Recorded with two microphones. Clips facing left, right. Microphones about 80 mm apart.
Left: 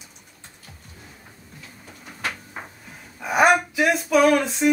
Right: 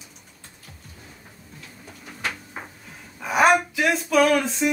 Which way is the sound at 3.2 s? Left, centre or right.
Centre.